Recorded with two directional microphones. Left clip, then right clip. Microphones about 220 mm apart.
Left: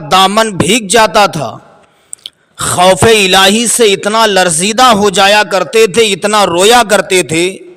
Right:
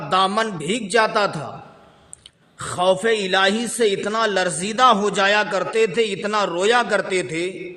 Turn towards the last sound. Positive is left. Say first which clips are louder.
# left 12 dB
turn(degrees=45)  # may be behind; listen again after turning